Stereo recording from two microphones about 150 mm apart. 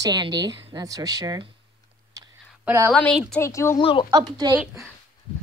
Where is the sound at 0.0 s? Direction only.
30° right (ahead or behind).